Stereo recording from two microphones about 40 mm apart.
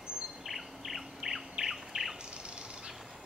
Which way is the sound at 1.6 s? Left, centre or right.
Centre.